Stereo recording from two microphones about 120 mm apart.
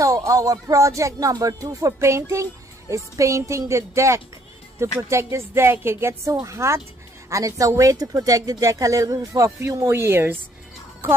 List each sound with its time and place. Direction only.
0.0 s speech: 30° right (ahead or behind)